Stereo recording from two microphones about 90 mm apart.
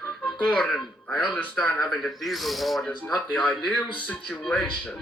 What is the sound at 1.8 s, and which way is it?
Speech, 5° left (ahead or behind).